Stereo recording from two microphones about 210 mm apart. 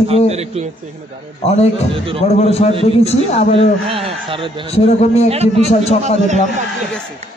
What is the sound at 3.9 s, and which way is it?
Speech, 25° right (ahead or behind).